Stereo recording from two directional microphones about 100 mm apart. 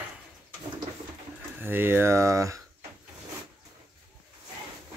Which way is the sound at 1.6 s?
20° right (ahead or behind).